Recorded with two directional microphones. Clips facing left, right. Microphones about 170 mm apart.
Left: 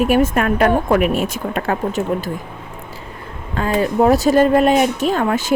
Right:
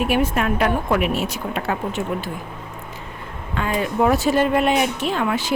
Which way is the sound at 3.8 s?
40° left (ahead or behind).